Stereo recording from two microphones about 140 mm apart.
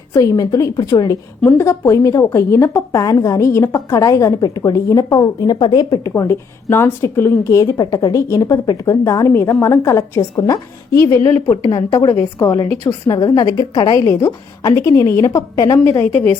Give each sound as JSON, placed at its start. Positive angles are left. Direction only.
{"t": 0.1, "sound": "a woman's voice", "side_deg": 25}
{"t": 1.4, "sound": "a woman's voice", "side_deg": 15}
{"t": 15.9, "sound": "a woman's voice", "side_deg": 15}